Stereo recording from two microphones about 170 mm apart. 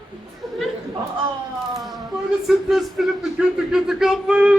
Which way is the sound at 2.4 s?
Centre (ahead or behind).